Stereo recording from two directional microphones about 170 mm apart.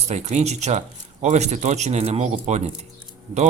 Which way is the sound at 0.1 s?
40° right (ahead or behind).